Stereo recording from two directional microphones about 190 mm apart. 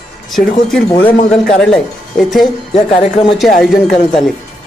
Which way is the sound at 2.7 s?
35° left (ahead or behind).